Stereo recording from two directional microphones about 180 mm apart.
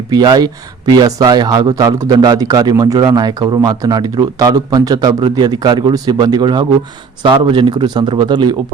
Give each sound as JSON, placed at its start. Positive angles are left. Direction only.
{"t": 0.1, "sound": "speech", "side_deg": -20}